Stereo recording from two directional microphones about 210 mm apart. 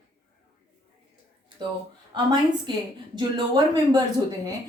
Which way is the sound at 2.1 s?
20° right (ahead or behind).